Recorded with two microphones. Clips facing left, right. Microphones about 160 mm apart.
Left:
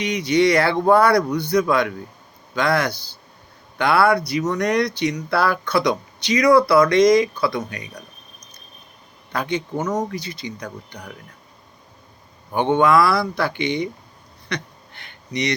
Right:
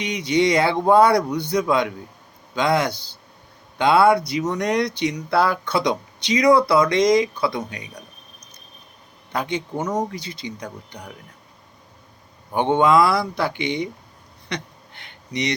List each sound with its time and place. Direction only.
0.0 s speech: 20° right (ahead or behind)
9.3 s speech: 20° right (ahead or behind)
10.1 s speech: 25° right (ahead or behind)
12.5 s speech: 20° right (ahead or behind)
14.5 s a sound: 20° right (ahead or behind)